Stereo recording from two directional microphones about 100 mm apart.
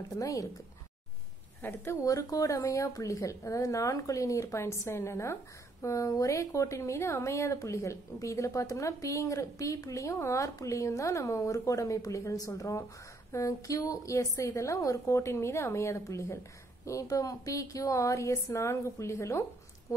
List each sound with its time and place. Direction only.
0.1 s speech: 35° left (ahead or behind)
1.6 s a woman's voice: 20° left (ahead or behind)
2.0 s speech: 35° left (ahead or behind)